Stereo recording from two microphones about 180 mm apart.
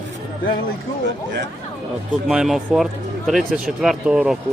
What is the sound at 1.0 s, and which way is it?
Speech, 75° right (ahead or behind).